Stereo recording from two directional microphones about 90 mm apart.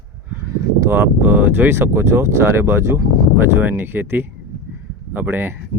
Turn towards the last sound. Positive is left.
turn(degrees=-20)  # may be behind; listen again after turning